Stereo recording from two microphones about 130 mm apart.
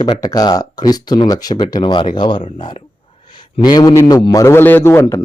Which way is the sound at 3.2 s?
35° left (ahead or behind).